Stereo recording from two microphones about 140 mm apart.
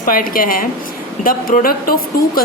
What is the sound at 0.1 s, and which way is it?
A woman's voice, 90° left.